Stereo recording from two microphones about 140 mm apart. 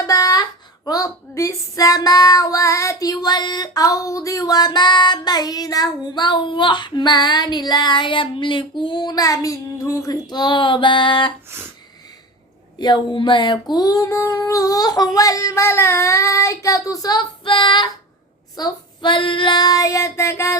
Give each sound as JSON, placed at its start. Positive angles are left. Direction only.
{"t": 0.0, "sound": "a sound", "side_deg": 25}
{"t": 0.9, "sound": "female singing", "side_deg": 25}
{"t": 12.8, "sound": "female singing", "side_deg": 35}